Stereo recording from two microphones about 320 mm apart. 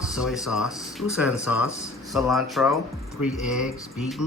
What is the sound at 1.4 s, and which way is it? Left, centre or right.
Speech, left.